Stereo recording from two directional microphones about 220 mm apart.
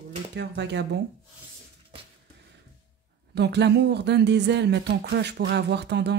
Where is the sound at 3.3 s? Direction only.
50° right (ahead or behind).